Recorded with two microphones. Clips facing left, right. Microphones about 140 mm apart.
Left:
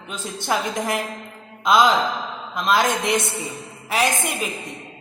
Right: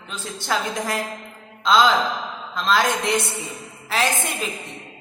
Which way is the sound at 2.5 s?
15° left (ahead or behind).